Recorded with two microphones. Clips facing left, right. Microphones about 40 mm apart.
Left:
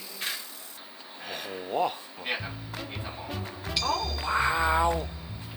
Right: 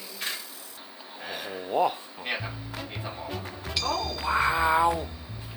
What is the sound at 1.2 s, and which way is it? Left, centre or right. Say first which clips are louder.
Music: right 1 dB; centre.